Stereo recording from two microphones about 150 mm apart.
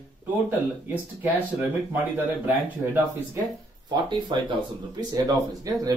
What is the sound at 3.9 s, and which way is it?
Speech, 30° right (ahead or behind).